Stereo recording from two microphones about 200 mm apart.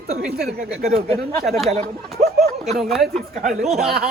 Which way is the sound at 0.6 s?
45° right (ahead or behind).